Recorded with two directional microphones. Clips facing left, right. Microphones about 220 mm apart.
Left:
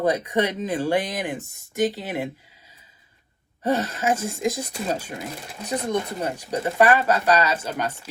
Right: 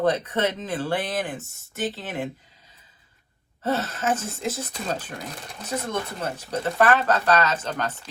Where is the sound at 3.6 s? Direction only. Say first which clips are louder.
Left 2 dB; 15° left (ahead or behind).